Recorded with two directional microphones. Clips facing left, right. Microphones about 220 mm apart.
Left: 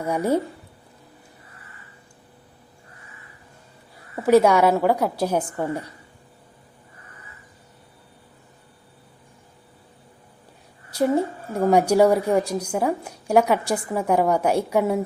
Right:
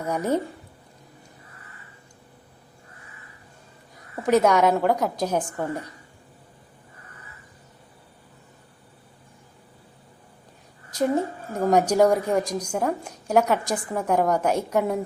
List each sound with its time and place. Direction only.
0.0 s a woman's voice: 10° left (ahead or behind)
4.1 s a woman's voice: 10° left (ahead or behind)
11.5 s a woman's voice: 10° left (ahead or behind)